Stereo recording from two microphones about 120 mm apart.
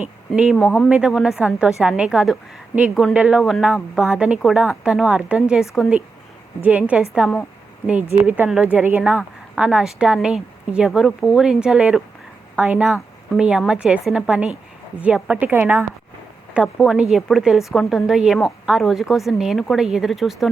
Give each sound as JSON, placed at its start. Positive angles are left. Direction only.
{"t": 0.0, "sound": "speech", "side_deg": -10}
{"t": 0.6, "sound": "speech", "side_deg": 15}
{"t": 0.9, "sound": "a woman's voice", "side_deg": -10}
{"t": 8.4, "sound": "a woman's voice", "side_deg": -10}
{"t": 16.8, "sound": "speech", "side_deg": -5}